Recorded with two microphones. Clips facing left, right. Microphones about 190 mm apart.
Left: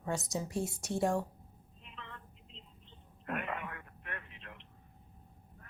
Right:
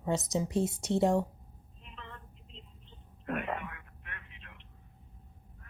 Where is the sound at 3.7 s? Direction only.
45° left (ahead or behind).